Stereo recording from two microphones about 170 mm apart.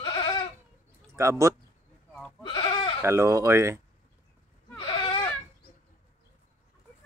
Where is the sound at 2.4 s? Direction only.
25° left (ahead or behind).